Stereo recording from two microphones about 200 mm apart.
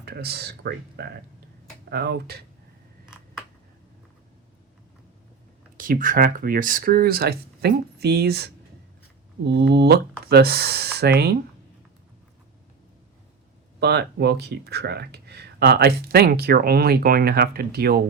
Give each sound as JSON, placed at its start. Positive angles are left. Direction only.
{"t": 0.0, "sound": "speech", "side_deg": -50}
{"t": 5.7, "sound": "speech", "side_deg": -45}
{"t": 13.7, "sound": "speech", "side_deg": -55}